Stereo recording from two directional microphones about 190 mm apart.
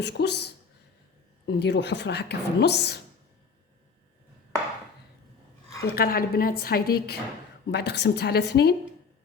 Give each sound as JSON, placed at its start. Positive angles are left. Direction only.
{"t": 0.0, "sound": "a woman's voice", "side_deg": 60}
{"t": 5.8, "sound": "a woman's voice", "side_deg": 50}